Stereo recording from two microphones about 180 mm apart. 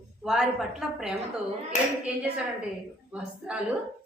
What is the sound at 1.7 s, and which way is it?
Speech, 40° left (ahead or behind).